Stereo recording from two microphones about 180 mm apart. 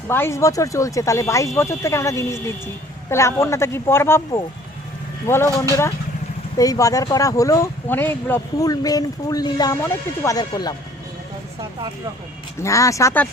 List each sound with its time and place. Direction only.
0.1 s speech: 15° left (ahead or behind)
6.6 s speech: 20° left (ahead or behind)
12.6 s speech: 15° left (ahead or behind)